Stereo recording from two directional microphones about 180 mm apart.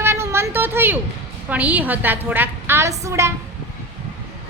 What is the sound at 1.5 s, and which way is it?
A woman's voice, 10° right (ahead or behind).